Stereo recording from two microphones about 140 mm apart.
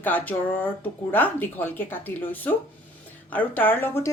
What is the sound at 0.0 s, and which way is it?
Speech, 15° left (ahead or behind).